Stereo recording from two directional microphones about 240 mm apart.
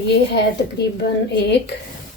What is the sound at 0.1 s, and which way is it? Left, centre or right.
A woman's voice, left.